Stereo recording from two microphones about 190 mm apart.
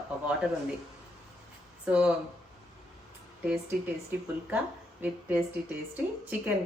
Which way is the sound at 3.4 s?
10° right (ahead or behind).